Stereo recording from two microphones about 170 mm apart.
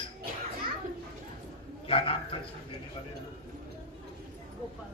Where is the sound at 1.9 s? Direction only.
30° left (ahead or behind).